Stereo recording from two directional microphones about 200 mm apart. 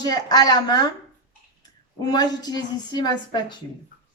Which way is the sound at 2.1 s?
20° left (ahead or behind).